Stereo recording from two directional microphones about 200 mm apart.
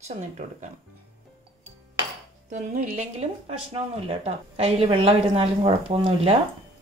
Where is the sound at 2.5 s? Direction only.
35° right (ahead or behind).